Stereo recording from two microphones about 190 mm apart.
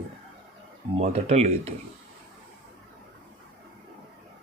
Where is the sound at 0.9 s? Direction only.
35° right (ahead or behind).